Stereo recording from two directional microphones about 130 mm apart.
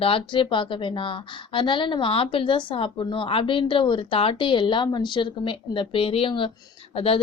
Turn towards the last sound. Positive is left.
turn(degrees=45)  # may be behind; listen again after turning